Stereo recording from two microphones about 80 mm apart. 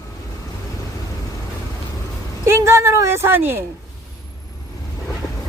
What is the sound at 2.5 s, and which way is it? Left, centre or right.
Speech, right.